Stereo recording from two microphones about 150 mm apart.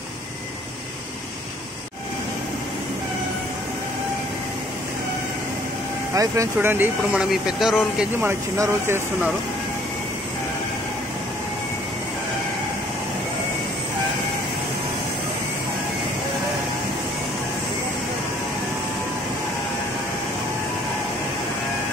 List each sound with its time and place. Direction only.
6.1 s speech: 20° right (ahead or behind)
7.2 s speech: centre (ahead or behind)
8.2 s speech: 15° right (ahead or behind)